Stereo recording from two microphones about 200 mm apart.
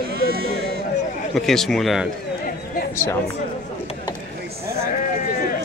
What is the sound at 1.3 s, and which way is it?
Speech, centre (ahead or behind).